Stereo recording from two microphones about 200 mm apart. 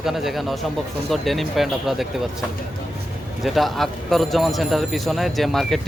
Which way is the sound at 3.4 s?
Centre (ahead or behind).